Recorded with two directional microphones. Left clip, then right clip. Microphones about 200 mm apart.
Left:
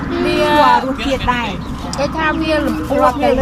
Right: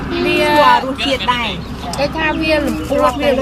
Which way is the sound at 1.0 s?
40° left (ahead or behind).